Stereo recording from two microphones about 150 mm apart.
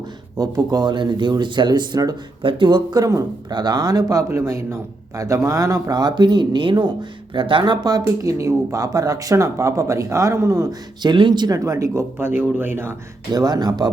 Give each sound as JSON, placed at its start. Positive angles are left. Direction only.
{"t": 0.3, "sound": "speech", "side_deg": -25}
{"t": 13.3, "sound": "speech", "side_deg": -25}